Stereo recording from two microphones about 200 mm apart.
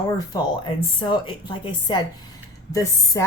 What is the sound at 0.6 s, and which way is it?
Speech, 25° left (ahead or behind).